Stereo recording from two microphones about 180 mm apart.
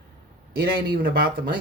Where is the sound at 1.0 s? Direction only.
55° right (ahead or behind).